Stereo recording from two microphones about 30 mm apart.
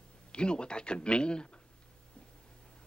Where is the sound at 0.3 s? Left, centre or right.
Left.